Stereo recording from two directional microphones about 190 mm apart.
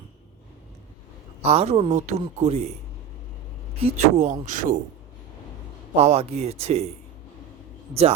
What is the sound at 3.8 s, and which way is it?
Speech, 35° right (ahead or behind).